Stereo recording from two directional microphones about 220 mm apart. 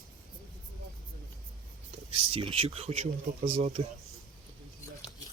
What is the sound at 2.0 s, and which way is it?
Speech, 25° right (ahead or behind).